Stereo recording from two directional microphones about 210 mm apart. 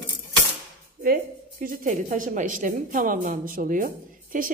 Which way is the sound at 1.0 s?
45° right (ahead or behind).